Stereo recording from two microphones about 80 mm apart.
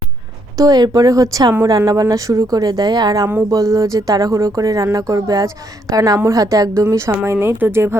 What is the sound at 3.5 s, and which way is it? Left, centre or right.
Speech, right.